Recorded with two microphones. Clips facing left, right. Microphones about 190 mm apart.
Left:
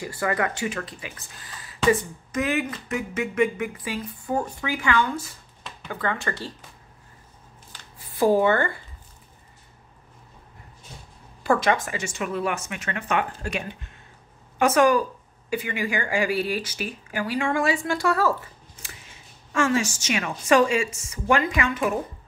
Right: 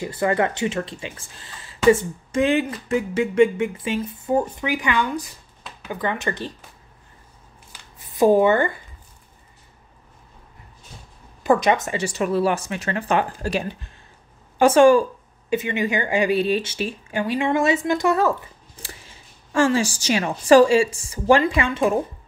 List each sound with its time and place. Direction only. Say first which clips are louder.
0.0 s speech: right 5 dB; 25° right (ahead or behind)
7.7 s shuffling cards: right 3 dB; 20° right (ahead or behind)
11.4 s a woman's voice: right 4 dB; 20° right (ahead or behind)
19.5 s a woman's voice: right 4 dB; 30° right (ahead or behind)